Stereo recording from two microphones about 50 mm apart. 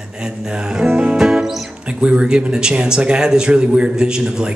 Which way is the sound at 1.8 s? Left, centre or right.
Right.